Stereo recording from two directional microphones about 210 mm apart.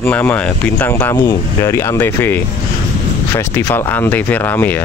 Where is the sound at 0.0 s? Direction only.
10° left (ahead or behind).